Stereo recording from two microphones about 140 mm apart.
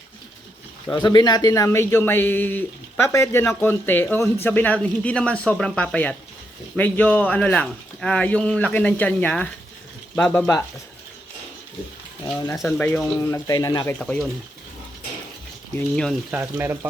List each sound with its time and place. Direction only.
0.9 s a man's voice: 30° left (ahead or behind); by 10.5 s 10° left (ahead or behind)
12.2 s speech: 20° left (ahead or behind)
12.6 s speech: 5° left (ahead or behind)
13.5 s speech: 25° left (ahead or behind)
14.0 s a man's voice: 5° left (ahead or behind)
15.7 s a man's voice: 5° left (ahead or behind)
16.3 s speech: 15° right (ahead or behind)